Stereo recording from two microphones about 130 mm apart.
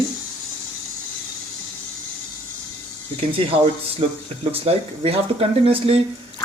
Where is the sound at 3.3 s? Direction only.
45° right (ahead or behind).